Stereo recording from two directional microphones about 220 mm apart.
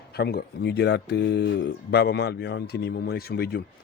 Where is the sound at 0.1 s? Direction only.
45° left (ahead or behind).